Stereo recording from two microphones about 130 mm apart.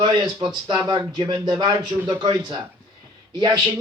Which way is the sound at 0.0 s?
35° right (ahead or behind).